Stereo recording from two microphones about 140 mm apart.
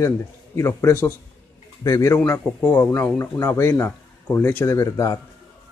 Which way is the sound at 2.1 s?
15° left (ahead or behind).